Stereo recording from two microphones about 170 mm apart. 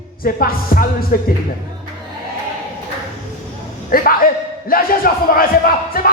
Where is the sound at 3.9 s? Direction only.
60° left (ahead or behind).